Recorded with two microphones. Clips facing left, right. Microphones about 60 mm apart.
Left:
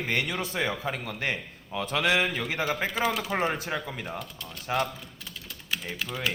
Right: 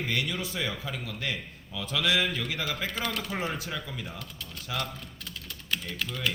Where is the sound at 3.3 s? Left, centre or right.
Left.